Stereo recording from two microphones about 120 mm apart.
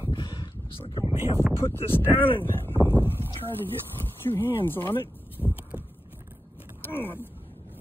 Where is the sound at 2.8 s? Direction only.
20° left (ahead or behind).